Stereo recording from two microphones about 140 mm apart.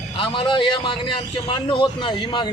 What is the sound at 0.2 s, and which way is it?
A man's voice, 35° left (ahead or behind).